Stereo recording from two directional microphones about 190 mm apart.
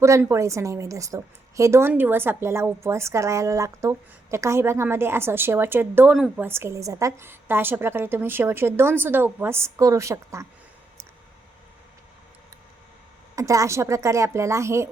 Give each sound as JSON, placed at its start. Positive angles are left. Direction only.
{"t": 0.0, "sound": "a woman's voice", "side_deg": -15}
{"t": 6.1, "sound": "speech", "side_deg": 0}
{"t": 6.4, "sound": "a woman's voice", "side_deg": -15}
{"t": 13.3, "sound": "a woman's voice", "side_deg": -15}